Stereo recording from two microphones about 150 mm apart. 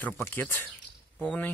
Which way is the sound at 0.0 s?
10° left (ahead or behind).